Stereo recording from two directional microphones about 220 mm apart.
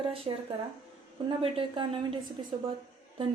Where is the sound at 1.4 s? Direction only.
20° right (ahead or behind).